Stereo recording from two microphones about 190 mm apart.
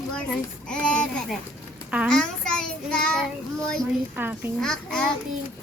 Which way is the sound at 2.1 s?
5° left (ahead or behind).